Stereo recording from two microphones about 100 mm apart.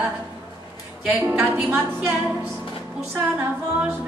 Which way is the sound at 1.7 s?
20° right (ahead or behind).